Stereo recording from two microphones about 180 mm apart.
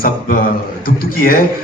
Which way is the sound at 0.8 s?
55° left (ahead or behind).